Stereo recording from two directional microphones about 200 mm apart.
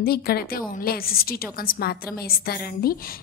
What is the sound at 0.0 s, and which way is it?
A woman's voice, 50° left (ahead or behind).